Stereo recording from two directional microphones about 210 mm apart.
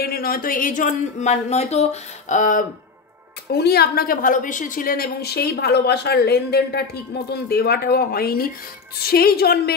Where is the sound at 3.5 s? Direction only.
50° left (ahead or behind).